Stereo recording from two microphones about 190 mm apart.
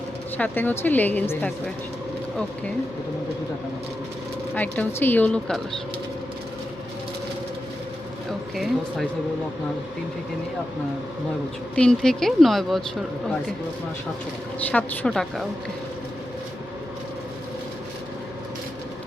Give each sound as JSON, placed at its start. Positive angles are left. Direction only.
{"t": 0.3, "sound": "speech", "side_deg": 10}
{"t": 4.5, "sound": "speech", "side_deg": 10}
{"t": 8.3, "sound": "speech", "side_deg": 0}
{"t": 11.7, "sound": "speech", "side_deg": 5}
{"t": 14.7, "sound": "speech", "side_deg": 5}